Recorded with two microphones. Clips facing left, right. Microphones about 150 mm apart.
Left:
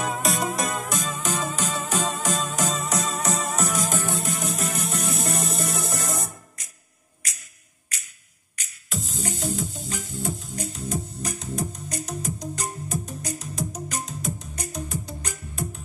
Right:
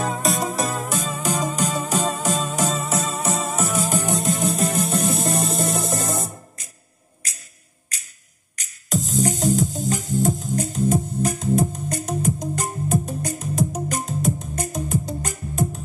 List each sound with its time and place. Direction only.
0.1 s music: centre (ahead or behind)
4.2 s music: 25° right (ahead or behind)
8.5 s music: 40° right (ahead or behind)